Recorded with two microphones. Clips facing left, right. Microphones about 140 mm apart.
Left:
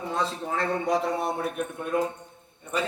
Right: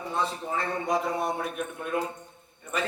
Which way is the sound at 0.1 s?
90° left.